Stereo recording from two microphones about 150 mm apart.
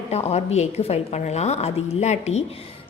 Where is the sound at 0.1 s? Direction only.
45° left (ahead or behind).